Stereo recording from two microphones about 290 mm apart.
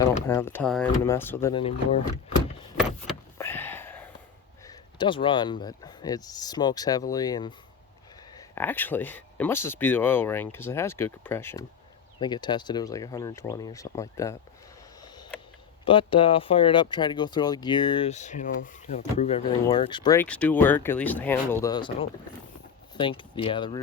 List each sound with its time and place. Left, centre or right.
0.3 s speech: centre
3.3 s power windows: centre
4.6 s speech: centre
15.0 s a sound: centre
15.8 s speech: centre
23.0 s speech: centre